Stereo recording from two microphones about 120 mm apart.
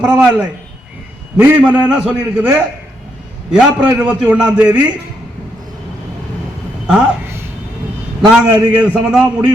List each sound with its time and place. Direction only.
0.0 s a man's voice: 10° right (ahead or behind)
6.9 s a sound: 20° right (ahead or behind)
8.5 s a man's voice: 15° right (ahead or behind)